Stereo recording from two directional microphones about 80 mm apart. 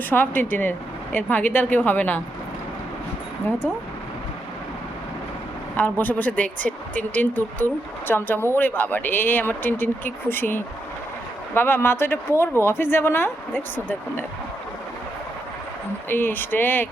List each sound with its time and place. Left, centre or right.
0.1 s speech: left
5.7 s speech: left
16.0 s speech: left